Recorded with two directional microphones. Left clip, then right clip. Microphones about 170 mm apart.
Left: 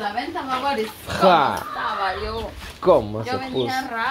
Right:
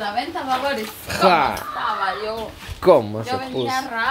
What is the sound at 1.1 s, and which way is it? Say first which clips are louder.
Speech: even; 5° left (ahead or behind).